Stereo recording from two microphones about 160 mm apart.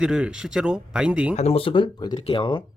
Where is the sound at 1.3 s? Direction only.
40° left (ahead or behind).